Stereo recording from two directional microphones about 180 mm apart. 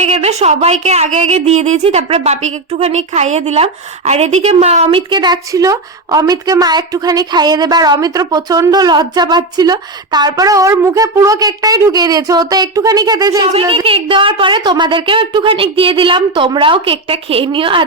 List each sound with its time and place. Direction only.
0.0 s a woman's voice: 35° right (ahead or behind); by 13.4 s 20° right (ahead or behind)
13.4 s a woman's voice: 30° right (ahead or behind)